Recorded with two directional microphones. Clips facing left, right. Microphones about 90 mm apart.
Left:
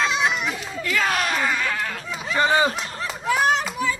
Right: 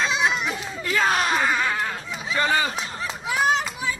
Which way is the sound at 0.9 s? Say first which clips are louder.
Right 1 dB; 25° right (ahead or behind).